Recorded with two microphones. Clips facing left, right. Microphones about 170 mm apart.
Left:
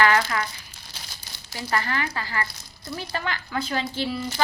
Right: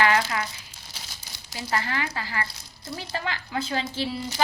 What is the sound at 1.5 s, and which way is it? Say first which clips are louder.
A woman's voice: left 2 dB; 20° right (ahead or behind).